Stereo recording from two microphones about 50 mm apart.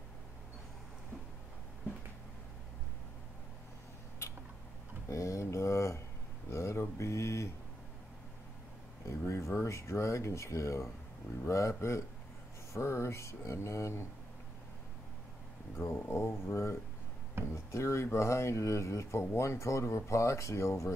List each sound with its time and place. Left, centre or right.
5.0 s a sound: left
6.5 s speech: left
9.0 s speech: left
12.7 s speech: left
13.6 s speech: left
16.1 s speech: left